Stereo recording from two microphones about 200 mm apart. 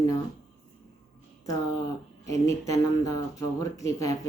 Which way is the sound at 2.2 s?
15° left (ahead or behind).